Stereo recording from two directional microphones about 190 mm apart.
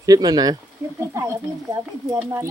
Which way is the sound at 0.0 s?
20° right (ahead or behind).